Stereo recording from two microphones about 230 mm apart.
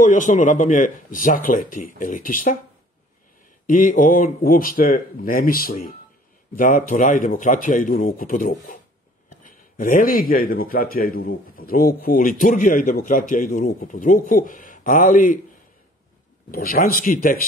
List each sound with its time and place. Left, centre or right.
0.0 s speech: left
3.6 s speech: left
16.4 s speech: left